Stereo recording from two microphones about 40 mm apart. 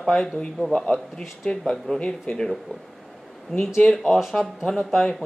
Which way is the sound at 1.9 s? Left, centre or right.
Left.